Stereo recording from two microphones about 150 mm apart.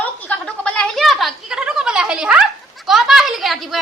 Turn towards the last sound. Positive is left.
turn(degrees=0)  # may be behind; listen again after turning